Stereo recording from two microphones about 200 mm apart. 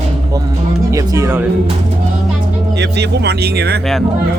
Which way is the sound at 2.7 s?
60° right (ahead or behind).